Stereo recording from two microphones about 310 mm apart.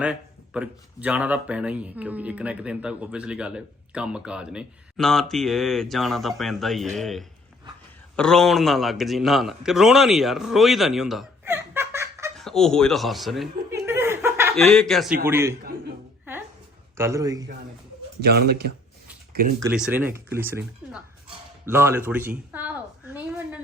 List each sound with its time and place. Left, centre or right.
0.0 s a man's voice: centre
13.8 s chuckle: centre
14.8 s speech: centre
17.0 s speech: centre
18.2 s speech: right
19.5 s speech: centre
21.7 s a sound: centre